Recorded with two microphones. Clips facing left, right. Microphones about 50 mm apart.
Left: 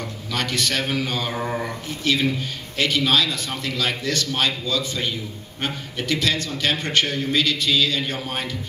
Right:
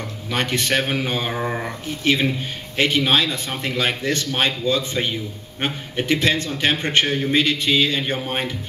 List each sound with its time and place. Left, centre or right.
0.3 s a man's voice: right